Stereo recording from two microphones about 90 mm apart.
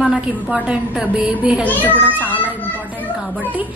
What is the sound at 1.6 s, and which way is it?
Speech, 20° left (ahead or behind).